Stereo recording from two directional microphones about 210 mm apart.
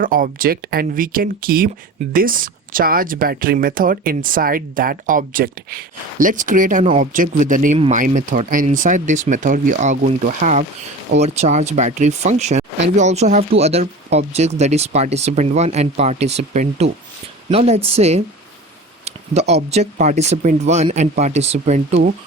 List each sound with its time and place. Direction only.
0.0 s speech: 40° right (ahead or behind)